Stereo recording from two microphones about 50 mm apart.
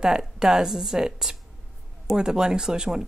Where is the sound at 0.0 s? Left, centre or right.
Centre.